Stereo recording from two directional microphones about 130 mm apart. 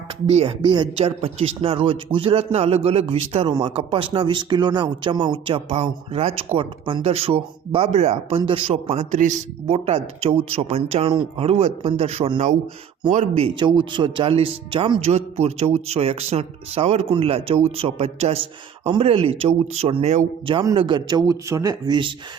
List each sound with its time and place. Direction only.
0.3 s speech: 55° right (ahead or behind)
0.6 s speech: 35° right (ahead or behind); by 8.4 s 55° right (ahead or behind)
8.4 s speech: 40° right (ahead or behind)
8.7 s a man's voice: 60° right (ahead or behind)
9.7 s speech: 50° right (ahead or behind)
13.1 s speech: 65° right (ahead or behind)
13.4 s speech: 35° right (ahead or behind)
15.1 s speech: 55° right (ahead or behind)
18.9 s speech: 40° right (ahead or behind)
20.5 s speech: 40° right (ahead or behind)